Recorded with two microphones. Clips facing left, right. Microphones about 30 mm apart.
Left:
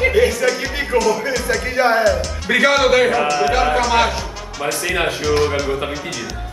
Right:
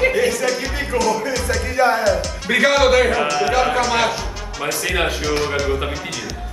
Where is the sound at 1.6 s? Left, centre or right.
Left.